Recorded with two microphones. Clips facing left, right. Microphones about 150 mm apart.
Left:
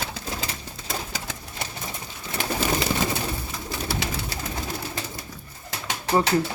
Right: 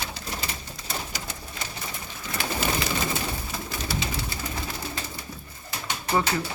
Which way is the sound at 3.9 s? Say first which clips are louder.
Left 1 dB; 75° left (ahead or behind).